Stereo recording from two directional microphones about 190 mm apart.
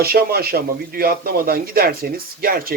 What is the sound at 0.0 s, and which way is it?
Speech, 55° right (ahead or behind).